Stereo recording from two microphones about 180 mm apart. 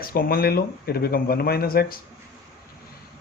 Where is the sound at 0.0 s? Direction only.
55° left (ahead or behind).